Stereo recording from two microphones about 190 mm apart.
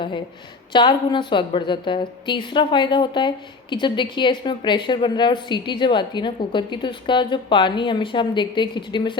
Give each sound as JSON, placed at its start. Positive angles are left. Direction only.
{"t": 0.7, "sound": "a woman's voice", "side_deg": 25}